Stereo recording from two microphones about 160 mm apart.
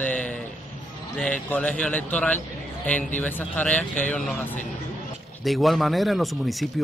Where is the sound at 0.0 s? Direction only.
10° left (ahead or behind).